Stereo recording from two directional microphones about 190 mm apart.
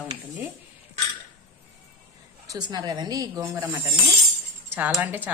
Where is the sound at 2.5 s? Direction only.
20° right (ahead or behind).